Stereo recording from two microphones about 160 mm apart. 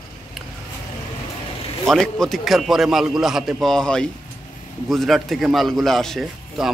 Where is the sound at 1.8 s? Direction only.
Centre (ahead or behind).